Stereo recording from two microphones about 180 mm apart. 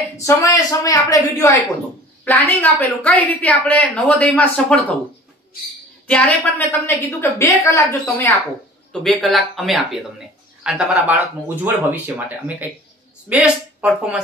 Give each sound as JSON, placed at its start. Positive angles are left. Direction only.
{"t": 0.2, "sound": "a woman's voice", "side_deg": 15}
{"t": 6.0, "sound": "a woman's voice", "side_deg": 5}
{"t": 9.0, "sound": "speech", "side_deg": 0}
{"t": 13.3, "sound": "speech", "side_deg": -5}